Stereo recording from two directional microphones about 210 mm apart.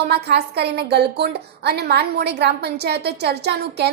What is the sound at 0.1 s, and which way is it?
A woman's voice, 50° right (ahead or behind).